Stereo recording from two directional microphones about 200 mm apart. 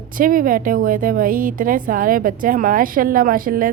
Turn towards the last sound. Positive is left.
turn(degrees=-45)  # may be behind; listen again after turning